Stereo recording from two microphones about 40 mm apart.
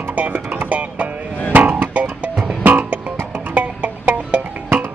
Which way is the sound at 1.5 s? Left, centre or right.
Right.